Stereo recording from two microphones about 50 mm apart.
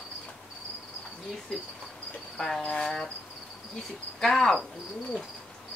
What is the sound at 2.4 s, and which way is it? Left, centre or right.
Speech, centre.